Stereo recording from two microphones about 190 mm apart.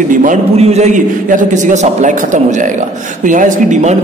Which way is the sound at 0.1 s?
45° right (ahead or behind).